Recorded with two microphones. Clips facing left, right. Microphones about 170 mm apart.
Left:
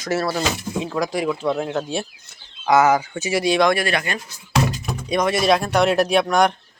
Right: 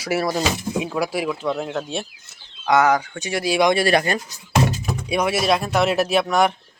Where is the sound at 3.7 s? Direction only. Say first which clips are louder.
Right 4 dB; 35° right (ahead or behind).